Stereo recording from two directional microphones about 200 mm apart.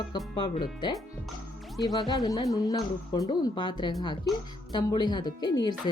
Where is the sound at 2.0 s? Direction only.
20° left (ahead or behind).